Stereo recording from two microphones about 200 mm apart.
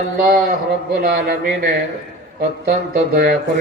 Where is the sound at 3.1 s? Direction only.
50° right (ahead or behind).